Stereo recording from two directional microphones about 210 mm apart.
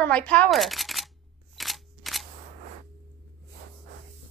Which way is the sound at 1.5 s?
Centre (ahead or behind).